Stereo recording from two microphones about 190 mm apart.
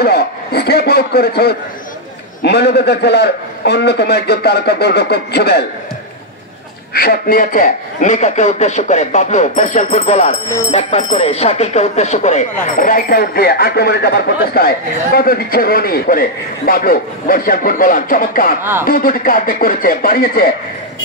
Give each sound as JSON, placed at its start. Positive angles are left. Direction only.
{"t": 0.0, "sound": "a man's voice", "side_deg": 55}
{"t": 6.9, "sound": "a man's voice", "side_deg": 50}
{"t": 12.7, "sound": "speech", "side_deg": 45}
{"t": 18.6, "sound": "speech", "side_deg": -10}
{"t": 18.9, "sound": "speech", "side_deg": 50}